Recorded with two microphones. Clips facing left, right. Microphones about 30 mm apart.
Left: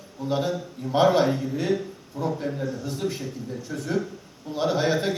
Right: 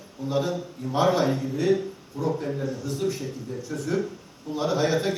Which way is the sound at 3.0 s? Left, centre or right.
Left.